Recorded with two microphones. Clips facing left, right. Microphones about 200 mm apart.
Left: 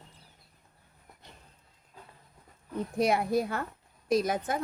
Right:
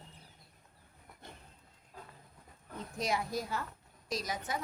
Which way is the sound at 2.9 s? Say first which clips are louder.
Left 9 dB; 60° left (ahead or behind).